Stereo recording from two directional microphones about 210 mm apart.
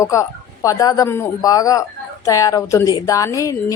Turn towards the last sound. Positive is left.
turn(degrees=15)  # may be behind; listen again after turning